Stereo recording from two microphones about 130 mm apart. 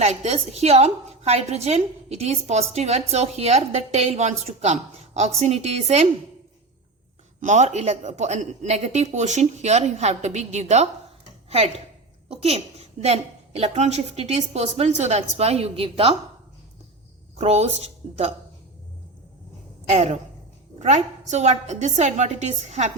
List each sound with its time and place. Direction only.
0.0 s a woman's voice: 60° right (ahead or behind)
7.3 s a woman's voice: 70° right (ahead or behind); by 16.1 s 45° right (ahead or behind)
17.3 s a woman's voice: 55° right (ahead or behind)
19.9 s a woman's voice: 55° right (ahead or behind)